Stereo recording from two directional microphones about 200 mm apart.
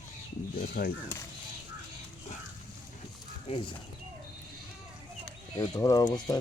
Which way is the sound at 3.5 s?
25° left (ahead or behind).